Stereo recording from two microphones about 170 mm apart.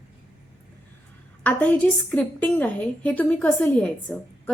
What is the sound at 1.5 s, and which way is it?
A woman's voice, 10° left (ahead or behind).